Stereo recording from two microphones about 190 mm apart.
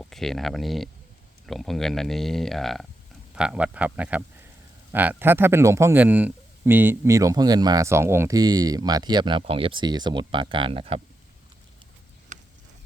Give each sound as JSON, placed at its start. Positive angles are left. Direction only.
{"t": 0.0, "sound": "a man's voice", "side_deg": 0}